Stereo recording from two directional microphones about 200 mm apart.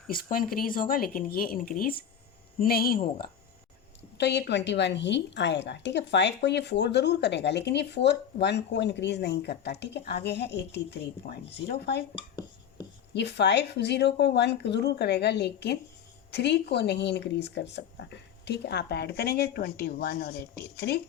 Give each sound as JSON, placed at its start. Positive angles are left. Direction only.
{"t": 0.1, "sound": "speech", "side_deg": 45}
{"t": 4.2, "sound": "a woman's voice", "side_deg": 60}
{"t": 12.1, "sound": "a sound", "side_deg": 20}
{"t": 13.1, "sound": "a woman's voice", "side_deg": 60}